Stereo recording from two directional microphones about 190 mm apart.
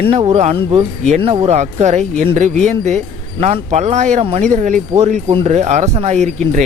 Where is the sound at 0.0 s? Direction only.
30° right (ahead or behind).